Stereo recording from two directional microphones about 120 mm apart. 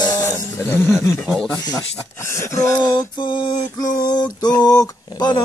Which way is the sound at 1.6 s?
35° left (ahead or behind).